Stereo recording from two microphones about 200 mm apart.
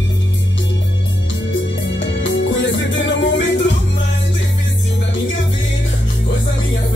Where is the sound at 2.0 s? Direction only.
65° left (ahead or behind).